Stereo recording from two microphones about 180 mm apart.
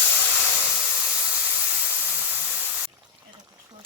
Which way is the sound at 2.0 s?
10° right (ahead or behind).